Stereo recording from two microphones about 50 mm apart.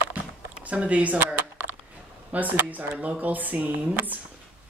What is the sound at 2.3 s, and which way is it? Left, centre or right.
Speech, right.